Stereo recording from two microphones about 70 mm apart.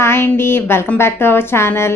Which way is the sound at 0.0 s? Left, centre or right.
Left.